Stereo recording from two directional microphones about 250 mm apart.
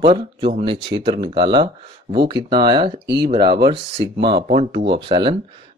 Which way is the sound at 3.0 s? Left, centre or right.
Right.